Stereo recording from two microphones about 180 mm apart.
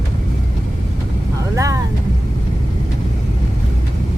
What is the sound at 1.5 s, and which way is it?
Speech, 15° right (ahead or behind).